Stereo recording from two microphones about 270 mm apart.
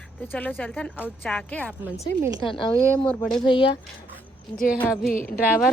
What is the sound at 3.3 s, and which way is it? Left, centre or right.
Speech, centre.